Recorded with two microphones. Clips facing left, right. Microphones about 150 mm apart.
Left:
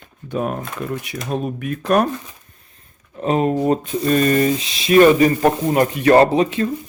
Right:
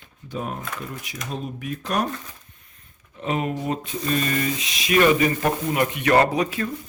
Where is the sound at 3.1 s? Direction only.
40° left (ahead or behind).